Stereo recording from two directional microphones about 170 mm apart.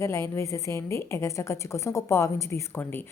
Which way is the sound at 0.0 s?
15° left (ahead or behind).